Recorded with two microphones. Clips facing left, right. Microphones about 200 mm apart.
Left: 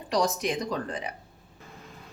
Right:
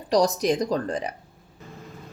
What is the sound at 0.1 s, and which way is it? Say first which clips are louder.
A woman's voice: right 6 dB; 40° right (ahead or behind).